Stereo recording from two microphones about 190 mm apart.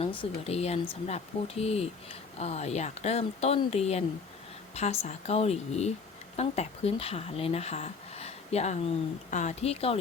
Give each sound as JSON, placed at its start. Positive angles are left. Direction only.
{"t": 0.2, "sound": "speech", "side_deg": 35}